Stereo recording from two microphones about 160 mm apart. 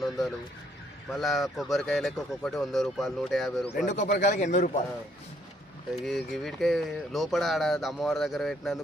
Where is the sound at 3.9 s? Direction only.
55° left (ahead or behind).